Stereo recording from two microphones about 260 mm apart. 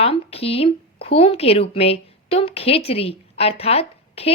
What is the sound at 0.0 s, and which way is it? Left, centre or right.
A woman's voice, left.